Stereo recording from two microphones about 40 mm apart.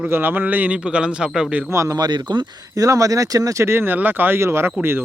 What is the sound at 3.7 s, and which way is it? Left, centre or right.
Speech, right.